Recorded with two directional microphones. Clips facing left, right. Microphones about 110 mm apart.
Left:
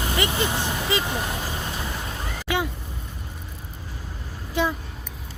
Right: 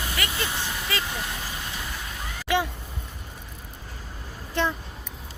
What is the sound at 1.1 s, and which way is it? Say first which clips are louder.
Vehicle: left 5 dB; 35° left (ahead or behind).